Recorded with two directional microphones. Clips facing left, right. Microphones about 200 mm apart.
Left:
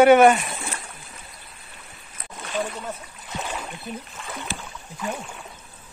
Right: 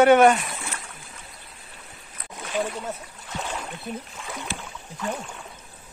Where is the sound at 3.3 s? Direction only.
5° left (ahead or behind).